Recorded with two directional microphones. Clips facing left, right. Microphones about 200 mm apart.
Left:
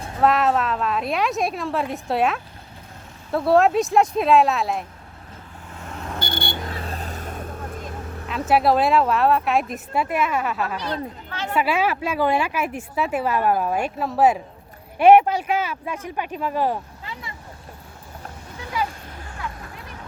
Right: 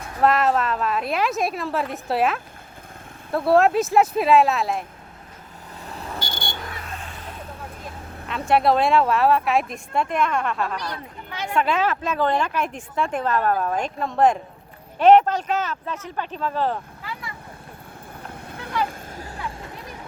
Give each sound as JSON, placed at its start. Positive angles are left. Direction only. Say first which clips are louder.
{"t": 0.2, "sound": "speech", "louder": "even", "side_deg": 0}
{"t": 6.1, "sound": "vehicle", "louder": "left 6 dB", "side_deg": 55}
{"t": 6.7, "sound": "vehicle", "louder": "left 5 dB", "side_deg": 30}
{"t": 8.3, "sound": "speech", "louder": "even", "side_deg": 0}
{"t": 11.3, "sound": "a sound", "louder": "right 4 dB", "side_deg": -15}
{"t": 11.5, "sound": "speech", "louder": "even", "side_deg": 10}
{"t": 17.0, "sound": "vehicle", "louder": "right 1 dB", "side_deg": 25}
{"t": 18.9, "sound": "vehicle", "louder": "right 3 dB", "side_deg": -40}